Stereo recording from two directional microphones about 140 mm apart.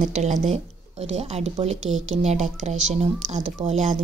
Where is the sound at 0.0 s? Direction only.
55° right (ahead or behind).